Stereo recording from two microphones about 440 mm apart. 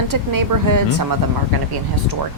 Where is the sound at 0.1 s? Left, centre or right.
Right.